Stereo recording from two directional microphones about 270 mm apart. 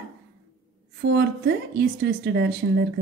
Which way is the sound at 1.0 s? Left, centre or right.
Right.